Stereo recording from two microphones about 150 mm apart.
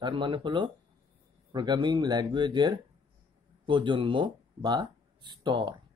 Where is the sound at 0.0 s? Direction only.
30° right (ahead or behind).